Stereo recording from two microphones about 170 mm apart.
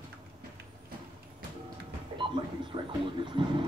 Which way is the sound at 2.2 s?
30° right (ahead or behind).